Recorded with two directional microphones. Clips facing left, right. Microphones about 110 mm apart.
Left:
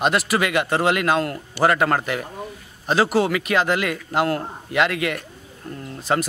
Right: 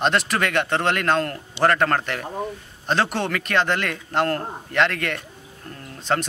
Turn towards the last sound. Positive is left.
turn(degrees=5)  # may be behind; listen again after turning